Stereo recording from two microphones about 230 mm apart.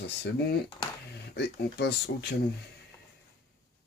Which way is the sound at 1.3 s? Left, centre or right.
Left.